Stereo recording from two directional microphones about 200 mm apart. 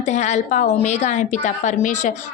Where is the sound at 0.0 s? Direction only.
35° left (ahead or behind).